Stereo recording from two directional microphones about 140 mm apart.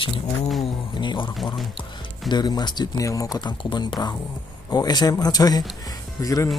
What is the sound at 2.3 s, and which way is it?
A man's voice, 30° left (ahead or behind).